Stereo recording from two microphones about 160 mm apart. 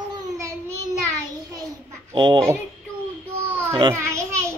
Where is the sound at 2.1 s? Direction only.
30° right (ahead or behind).